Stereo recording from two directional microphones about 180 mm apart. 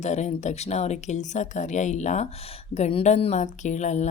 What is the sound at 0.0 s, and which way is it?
A woman's voice, 40° left (ahead or behind).